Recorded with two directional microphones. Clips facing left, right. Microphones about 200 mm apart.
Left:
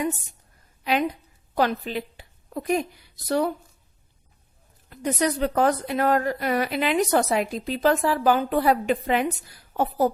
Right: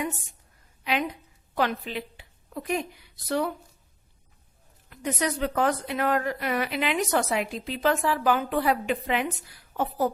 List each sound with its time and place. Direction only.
0.9 s a woman's voice: 40° left (ahead or behind)
4.9 s speech: 40° left (ahead or behind)